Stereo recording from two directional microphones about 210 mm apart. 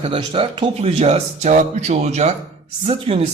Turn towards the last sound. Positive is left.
turn(degrees=-30)  # may be behind; listen again after turning